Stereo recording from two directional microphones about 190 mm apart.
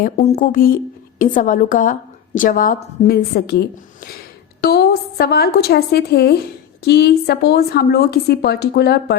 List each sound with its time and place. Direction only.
0.0 s a woman's voice: 40° left (ahead or behind); by 9.1 s 60° left (ahead or behind)